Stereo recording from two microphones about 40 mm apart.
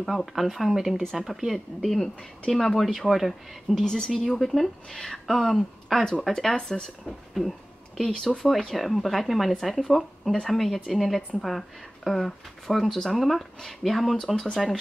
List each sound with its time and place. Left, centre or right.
0.0 s speech: centre
3.7 s a woman's voice: centre